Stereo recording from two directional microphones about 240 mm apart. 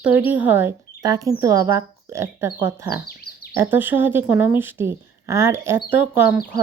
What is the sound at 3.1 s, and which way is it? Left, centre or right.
Chirp, left.